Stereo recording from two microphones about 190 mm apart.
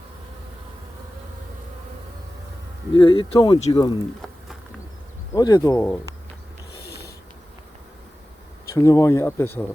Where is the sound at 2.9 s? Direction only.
25° left (ahead or behind).